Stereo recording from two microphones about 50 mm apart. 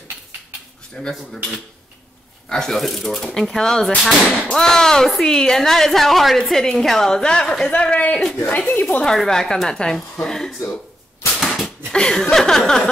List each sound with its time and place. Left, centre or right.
0.9 s speech: centre
2.5 s speech: centre
7.7 s speech: left
9.0 s speech: centre
11.3 s dog: centre
11.9 s speech: centre